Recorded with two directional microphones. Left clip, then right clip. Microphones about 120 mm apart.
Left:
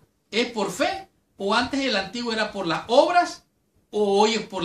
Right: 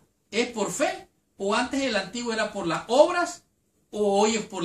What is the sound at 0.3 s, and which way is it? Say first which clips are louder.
A man's voice: left 2 dB; 15° left (ahead or behind).